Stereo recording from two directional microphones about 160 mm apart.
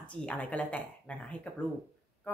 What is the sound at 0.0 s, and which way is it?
Speech, 5° left (ahead or behind).